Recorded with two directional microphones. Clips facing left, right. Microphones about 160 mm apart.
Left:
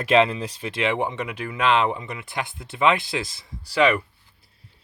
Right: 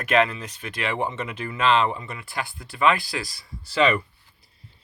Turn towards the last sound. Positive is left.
turn(degrees=10)  # may be behind; listen again after turning